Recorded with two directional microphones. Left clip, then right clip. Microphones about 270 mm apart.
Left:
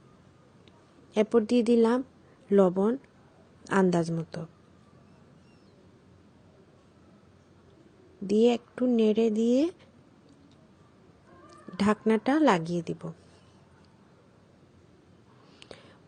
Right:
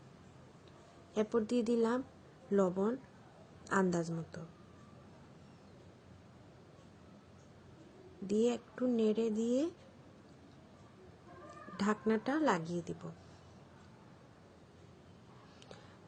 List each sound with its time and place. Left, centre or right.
1.1 s a woman's voice: left
8.3 s a woman's voice: left
11.5 s a woman's voice: left
15.6 s a sound: left